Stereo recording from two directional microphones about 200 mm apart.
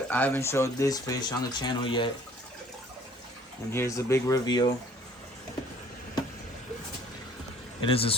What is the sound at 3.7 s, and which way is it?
Speech, 15° left (ahead or behind).